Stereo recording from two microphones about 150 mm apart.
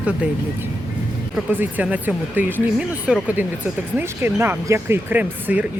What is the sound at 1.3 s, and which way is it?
Speech, 10° right (ahead or behind).